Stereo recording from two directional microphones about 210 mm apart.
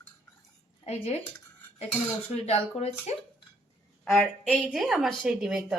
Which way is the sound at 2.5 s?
30° left (ahead or behind).